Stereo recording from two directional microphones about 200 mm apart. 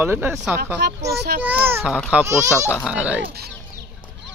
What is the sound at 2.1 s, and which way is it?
Speech, 15° right (ahead or behind).